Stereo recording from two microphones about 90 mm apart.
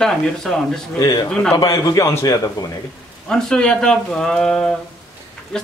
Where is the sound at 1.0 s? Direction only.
40° left (ahead or behind).